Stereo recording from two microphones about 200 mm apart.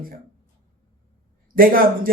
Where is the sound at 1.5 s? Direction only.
45° right (ahead or behind).